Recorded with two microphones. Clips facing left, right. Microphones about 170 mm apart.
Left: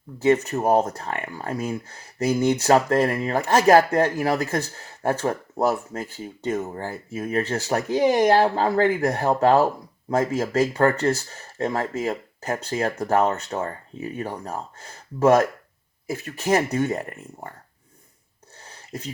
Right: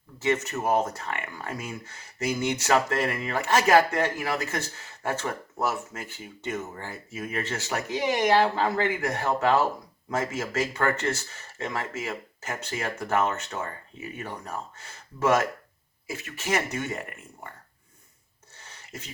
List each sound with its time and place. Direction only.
0.2 s speech: 35° left (ahead or behind)